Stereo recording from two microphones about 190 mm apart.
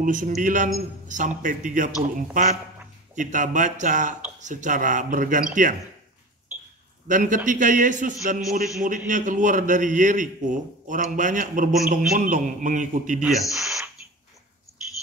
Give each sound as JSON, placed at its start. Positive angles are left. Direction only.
{"t": 0.0, "sound": "a man's voice", "side_deg": -45}
{"t": 7.1, "sound": "a man's voice", "side_deg": -45}
{"t": 13.2, "sound": "speech", "side_deg": 0}